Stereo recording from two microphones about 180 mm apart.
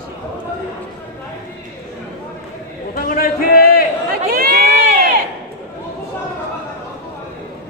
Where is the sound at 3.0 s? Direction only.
50° left (ahead or behind).